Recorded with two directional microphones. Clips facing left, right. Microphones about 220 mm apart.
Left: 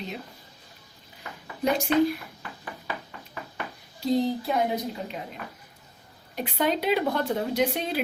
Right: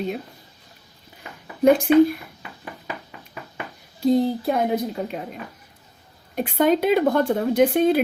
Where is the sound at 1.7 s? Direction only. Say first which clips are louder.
Right 7 dB; 50° right (ahead or behind).